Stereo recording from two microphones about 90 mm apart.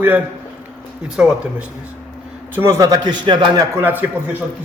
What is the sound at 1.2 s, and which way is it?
Speech, 10° right (ahead or behind).